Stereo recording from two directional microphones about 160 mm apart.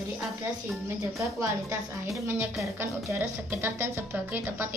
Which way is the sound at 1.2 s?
20° right (ahead or behind).